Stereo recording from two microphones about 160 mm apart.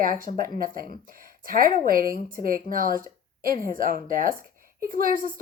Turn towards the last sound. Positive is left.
turn(degrees=-60)  # may be behind; listen again after turning